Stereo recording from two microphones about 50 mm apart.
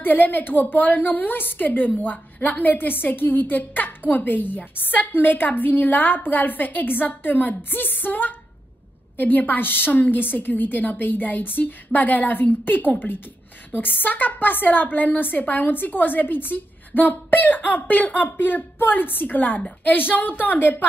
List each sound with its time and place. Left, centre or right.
0.0 s a woman's voice: left